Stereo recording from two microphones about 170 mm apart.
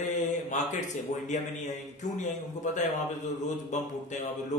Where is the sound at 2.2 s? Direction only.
45° left (ahead or behind).